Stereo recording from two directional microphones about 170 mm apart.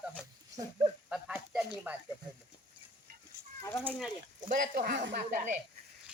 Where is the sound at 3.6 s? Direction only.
15° left (ahead or behind).